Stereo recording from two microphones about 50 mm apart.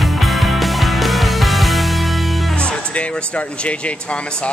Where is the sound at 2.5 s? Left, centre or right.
Centre.